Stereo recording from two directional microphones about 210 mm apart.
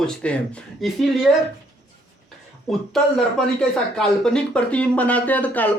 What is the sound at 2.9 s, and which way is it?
Speech, centre (ahead or behind).